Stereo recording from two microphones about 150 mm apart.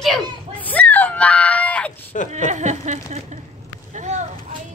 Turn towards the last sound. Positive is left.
turn(degrees=-50)  # may be behind; listen again after turning